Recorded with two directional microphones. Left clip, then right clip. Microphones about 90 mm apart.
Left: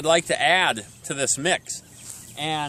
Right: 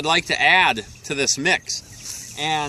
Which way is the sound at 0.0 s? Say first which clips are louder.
Right 2 dB; 35° left (ahead or behind).